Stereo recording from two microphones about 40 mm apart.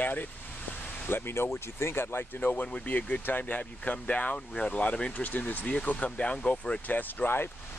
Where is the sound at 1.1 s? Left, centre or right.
Left.